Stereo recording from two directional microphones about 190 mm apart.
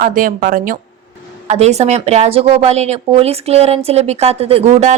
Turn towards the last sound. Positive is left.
turn(degrees=-35)  # may be behind; listen again after turning